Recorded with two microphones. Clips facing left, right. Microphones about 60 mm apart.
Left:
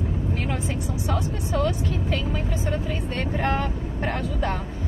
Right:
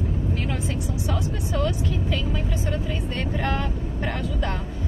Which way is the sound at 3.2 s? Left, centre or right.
Left.